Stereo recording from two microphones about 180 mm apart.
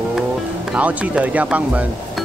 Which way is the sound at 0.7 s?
10° right (ahead or behind).